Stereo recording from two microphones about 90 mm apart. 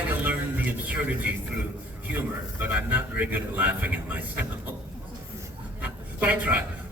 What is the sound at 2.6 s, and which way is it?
Speech, 20° right (ahead or behind).